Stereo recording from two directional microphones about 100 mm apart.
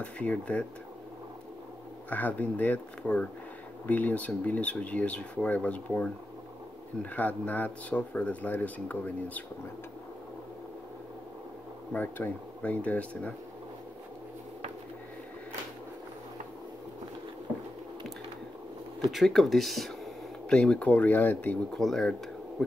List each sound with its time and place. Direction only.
0.0 s speech: 10° left (ahead or behind)
2.0 s speech: 15° left (ahead or behind)
11.9 s speech: 15° left (ahead or behind)
19.0 s speech: centre (ahead or behind); by 21.5 s 15° left (ahead or behind)
21.7 s speech: 5° left (ahead or behind)